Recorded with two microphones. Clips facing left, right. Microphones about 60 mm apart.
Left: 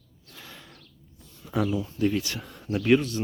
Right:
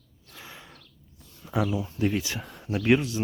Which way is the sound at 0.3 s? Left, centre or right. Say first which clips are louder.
Right 1 dB; centre.